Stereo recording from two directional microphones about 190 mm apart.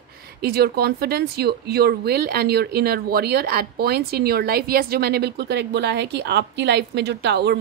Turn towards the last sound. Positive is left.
turn(degrees=-60)  # may be behind; listen again after turning